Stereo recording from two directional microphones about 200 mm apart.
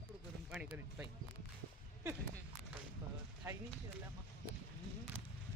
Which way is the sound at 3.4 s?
10° right (ahead or behind).